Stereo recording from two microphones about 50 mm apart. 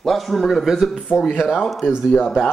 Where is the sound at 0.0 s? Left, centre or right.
Centre.